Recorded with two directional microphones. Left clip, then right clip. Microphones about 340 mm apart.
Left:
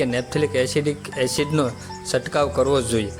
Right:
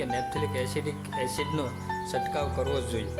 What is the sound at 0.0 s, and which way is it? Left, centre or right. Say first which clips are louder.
Speech: left 8 dB; right.